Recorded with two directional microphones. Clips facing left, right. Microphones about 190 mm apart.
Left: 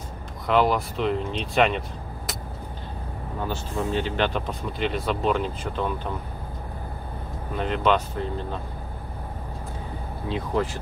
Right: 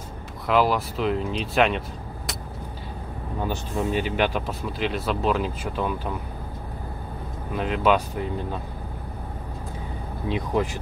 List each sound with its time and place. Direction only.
0.5 s speech: centre (ahead or behind)
3.4 s speech: 10° right (ahead or behind)
7.5 s speech: 5° right (ahead or behind)
10.2 s speech: 15° right (ahead or behind)